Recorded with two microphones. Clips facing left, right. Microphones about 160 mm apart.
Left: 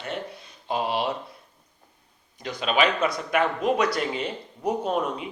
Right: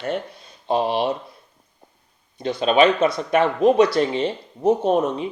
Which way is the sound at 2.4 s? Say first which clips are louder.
Right 7 dB; 30° right (ahead or behind).